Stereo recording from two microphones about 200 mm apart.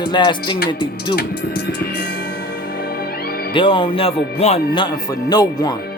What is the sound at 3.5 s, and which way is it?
Speech, 25° left (ahead or behind).